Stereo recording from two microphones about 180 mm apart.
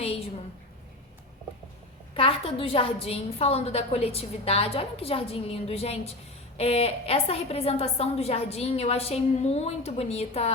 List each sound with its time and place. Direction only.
2.1 s a woman's voice: 30° left (ahead or behind)